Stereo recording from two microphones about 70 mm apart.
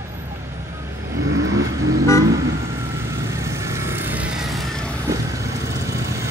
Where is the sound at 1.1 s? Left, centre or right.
Right.